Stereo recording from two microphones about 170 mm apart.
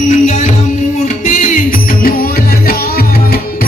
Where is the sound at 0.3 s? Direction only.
45° left (ahead or behind).